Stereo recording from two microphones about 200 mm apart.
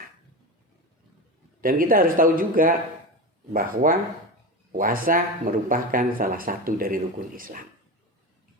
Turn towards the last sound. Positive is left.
turn(degrees=-45)  # may be behind; listen again after turning